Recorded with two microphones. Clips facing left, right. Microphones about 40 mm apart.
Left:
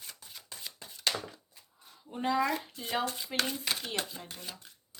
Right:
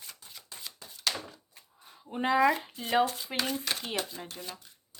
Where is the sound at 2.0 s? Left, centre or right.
Right.